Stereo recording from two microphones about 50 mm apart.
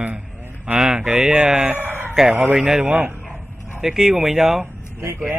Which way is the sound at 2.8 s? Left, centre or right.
Right.